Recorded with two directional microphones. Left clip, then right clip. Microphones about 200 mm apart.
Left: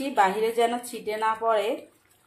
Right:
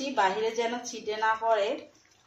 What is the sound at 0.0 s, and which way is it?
A woman's voice, 45° left (ahead or behind).